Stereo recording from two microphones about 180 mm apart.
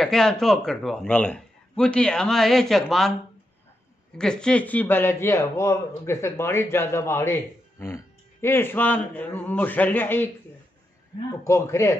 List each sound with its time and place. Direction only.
0.0 s a man's voice: centre (ahead or behind)
4.2 s speech: 5° left (ahead or behind)
11.4 s speech: 15° left (ahead or behind)